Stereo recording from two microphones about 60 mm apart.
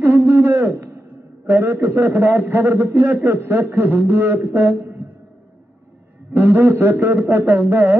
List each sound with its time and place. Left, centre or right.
0.0 s a man's voice: right
6.3 s speech: right